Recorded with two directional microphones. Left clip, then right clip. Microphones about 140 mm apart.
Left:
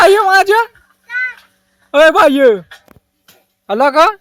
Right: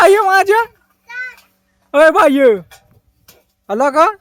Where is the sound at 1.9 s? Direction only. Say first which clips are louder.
Left 1 dB; 5° right (ahead or behind).